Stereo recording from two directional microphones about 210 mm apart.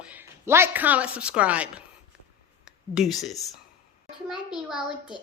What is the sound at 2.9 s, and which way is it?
A woman's voice, centre (ahead or behind).